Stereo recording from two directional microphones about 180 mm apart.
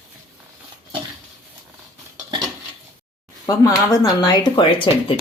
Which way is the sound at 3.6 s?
20° left (ahead or behind).